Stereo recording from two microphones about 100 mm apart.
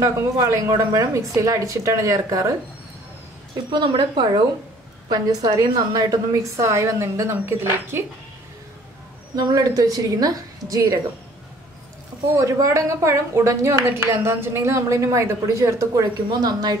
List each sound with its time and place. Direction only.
0.0 s a woman's voice: 35° right (ahead or behind)
3.7 s a woman's voice: 55° right (ahead or behind)
5.1 s a woman's voice: 40° right (ahead or behind); by 8.0 s 25° right (ahead or behind)
9.3 s a woman's voice: 40° right (ahead or behind)
12.4 s a woman's voice: 30° right (ahead or behind)